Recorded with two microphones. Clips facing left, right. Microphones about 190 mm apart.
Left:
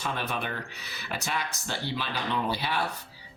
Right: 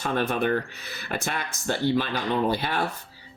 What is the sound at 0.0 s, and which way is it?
Speech, 50° right (ahead or behind).